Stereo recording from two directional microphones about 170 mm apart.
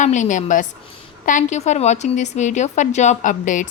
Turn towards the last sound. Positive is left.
turn(degrees=50)  # may be behind; listen again after turning